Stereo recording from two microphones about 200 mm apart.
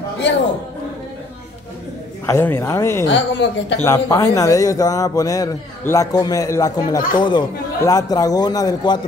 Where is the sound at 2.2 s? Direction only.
10° left (ahead or behind).